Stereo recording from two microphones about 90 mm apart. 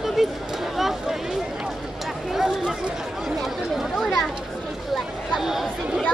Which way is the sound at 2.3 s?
5° right (ahead or behind).